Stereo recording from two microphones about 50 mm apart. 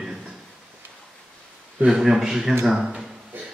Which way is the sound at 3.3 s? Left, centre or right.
Right.